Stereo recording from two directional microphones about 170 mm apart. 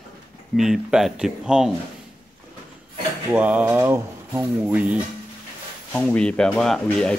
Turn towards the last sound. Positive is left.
turn(degrees=5)  # may be behind; listen again after turning